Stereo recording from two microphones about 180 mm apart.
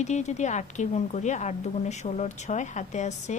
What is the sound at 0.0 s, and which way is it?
A woman's voice, 40° left (ahead or behind).